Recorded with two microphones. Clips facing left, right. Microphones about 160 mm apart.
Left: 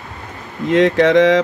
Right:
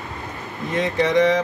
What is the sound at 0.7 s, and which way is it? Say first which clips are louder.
Speech: left 8 dB; 90° left.